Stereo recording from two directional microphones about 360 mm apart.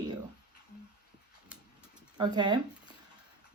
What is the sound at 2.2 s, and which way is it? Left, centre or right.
Speech, centre.